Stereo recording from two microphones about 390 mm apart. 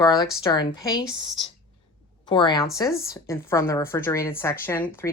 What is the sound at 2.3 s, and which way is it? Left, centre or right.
Speech, centre.